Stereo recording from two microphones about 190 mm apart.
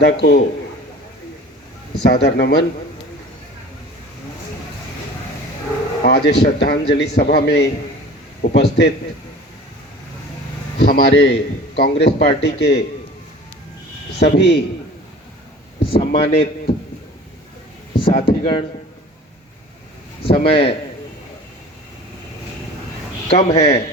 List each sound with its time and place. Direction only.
0.0 s a man's voice: 55° left (ahead or behind)
2.0 s a man's voice: 60° left (ahead or behind)
6.0 s a man's voice: 55° left (ahead or behind)
10.8 s a man's voice: 55° left (ahead or behind)
14.2 s a man's voice: 60° left (ahead or behind)
15.8 s a man's voice: 30° left (ahead or behind)
17.9 s speech: 30° left (ahead or behind)
20.2 s a man's voice: 30° left (ahead or behind)
23.3 s speech: 35° left (ahead or behind)